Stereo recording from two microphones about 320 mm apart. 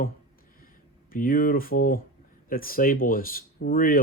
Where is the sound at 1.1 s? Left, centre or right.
Left.